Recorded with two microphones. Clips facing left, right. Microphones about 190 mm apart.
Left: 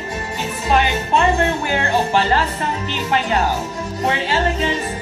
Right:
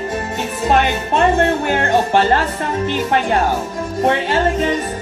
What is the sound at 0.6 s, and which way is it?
Music, 50° right (ahead or behind).